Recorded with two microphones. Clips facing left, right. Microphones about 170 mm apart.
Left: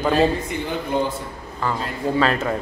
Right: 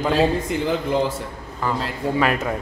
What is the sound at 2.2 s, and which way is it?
Speech, 15° right (ahead or behind).